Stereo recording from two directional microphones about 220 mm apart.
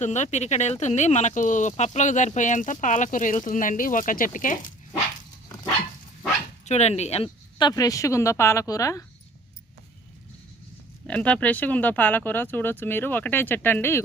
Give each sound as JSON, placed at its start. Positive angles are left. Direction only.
{"t": 0.0, "sound": "speech", "side_deg": 30}
{"t": 6.7, "sound": "speech", "side_deg": 30}
{"t": 11.0, "sound": "speech", "side_deg": 5}